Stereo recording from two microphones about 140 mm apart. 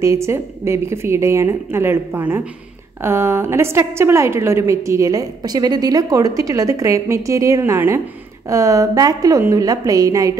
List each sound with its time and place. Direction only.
0.0 s a woman's voice: 20° right (ahead or behind)